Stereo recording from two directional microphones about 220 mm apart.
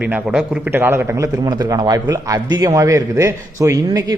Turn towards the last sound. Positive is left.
turn(degrees=-15)  # may be behind; listen again after turning